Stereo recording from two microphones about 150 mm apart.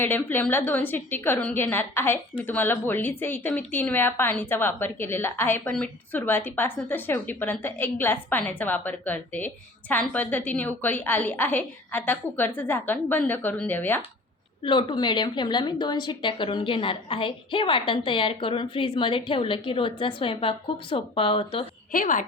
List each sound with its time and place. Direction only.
0.0 s speech: 15° left (ahead or behind)
14.6 s a woman's voice: 35° left (ahead or behind)
21.9 s a woman's voice: 60° left (ahead or behind)